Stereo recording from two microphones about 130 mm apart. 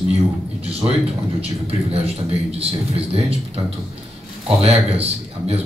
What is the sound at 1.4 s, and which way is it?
Speech, 50° right (ahead or behind).